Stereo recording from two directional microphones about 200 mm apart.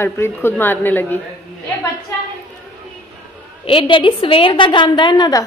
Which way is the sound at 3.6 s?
25° left (ahead or behind).